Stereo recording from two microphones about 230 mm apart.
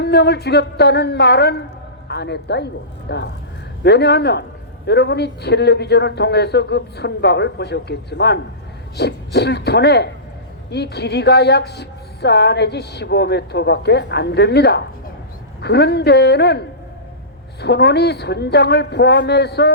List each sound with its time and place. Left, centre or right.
0.0 s a woman's voice: left